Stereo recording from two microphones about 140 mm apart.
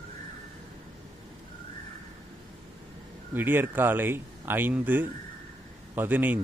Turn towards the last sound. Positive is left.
turn(degrees=-10)  # may be behind; listen again after turning